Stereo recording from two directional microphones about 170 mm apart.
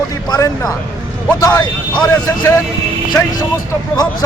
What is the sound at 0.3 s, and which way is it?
Speech, 20° left (ahead or behind).